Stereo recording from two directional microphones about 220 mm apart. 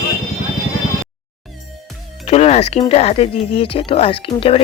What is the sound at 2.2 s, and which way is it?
Music, 30° left (ahead or behind).